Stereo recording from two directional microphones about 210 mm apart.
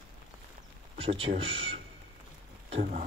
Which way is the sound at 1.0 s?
25° right (ahead or behind).